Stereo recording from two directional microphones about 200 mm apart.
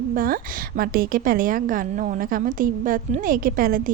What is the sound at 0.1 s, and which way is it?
A woman's voice, 45° right (ahead or behind).